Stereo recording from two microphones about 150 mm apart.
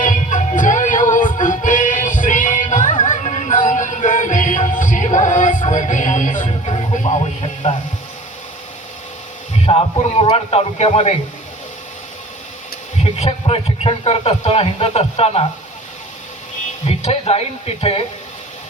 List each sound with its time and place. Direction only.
0.0 s music: 55° left (ahead or behind)
6.5 s music: 40° left (ahead or behind)
6.9 s music: 50° left (ahead or behind)
9.6 s a man's voice: 40° left (ahead or behind)
13.0 s a man's voice: 45° left (ahead or behind)
16.8 s a man's voice: 40° left (ahead or behind)